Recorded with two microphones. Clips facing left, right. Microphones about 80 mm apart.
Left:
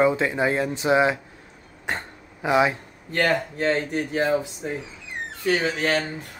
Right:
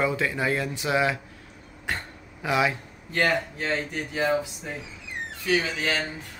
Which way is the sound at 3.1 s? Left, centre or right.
Left.